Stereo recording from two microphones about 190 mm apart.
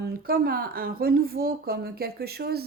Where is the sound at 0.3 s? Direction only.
50° right (ahead or behind).